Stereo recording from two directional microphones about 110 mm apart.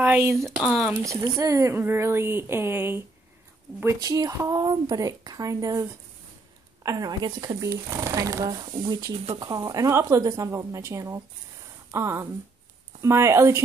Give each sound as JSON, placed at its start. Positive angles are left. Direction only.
{"t": 0.0, "sound": "speech", "side_deg": -20}
{"t": 0.4, "sound": "speech", "side_deg": -5}
{"t": 0.9, "sound": "speech", "side_deg": -30}
{"t": 3.8, "sound": "a woman's voice", "side_deg": -30}
{"t": 7.2, "sound": "speech", "side_deg": -45}
{"t": 7.6, "sound": "speech", "side_deg": -25}
{"t": 8.5, "sound": "speech", "side_deg": -45}